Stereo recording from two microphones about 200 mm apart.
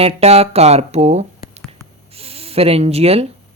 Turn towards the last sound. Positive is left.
turn(degrees=-30)  # may be behind; listen again after turning